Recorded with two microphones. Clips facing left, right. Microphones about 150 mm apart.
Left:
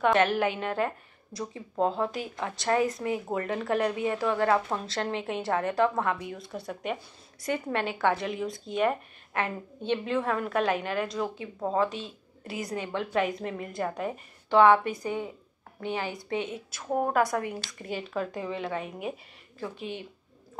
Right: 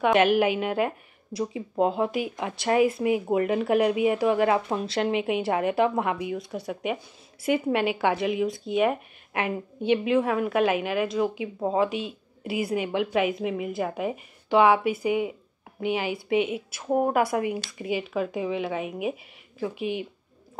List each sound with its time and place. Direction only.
0.0 s speech: 15° right (ahead or behind)
6.2 s speech: centre (ahead or behind)